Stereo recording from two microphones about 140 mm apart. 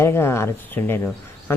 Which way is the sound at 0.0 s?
15° left (ahead or behind).